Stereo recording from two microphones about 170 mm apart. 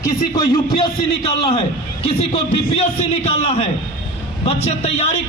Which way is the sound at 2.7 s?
40° left (ahead or behind).